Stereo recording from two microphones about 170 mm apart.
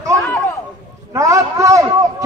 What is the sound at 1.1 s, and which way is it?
Speech, 20° right (ahead or behind).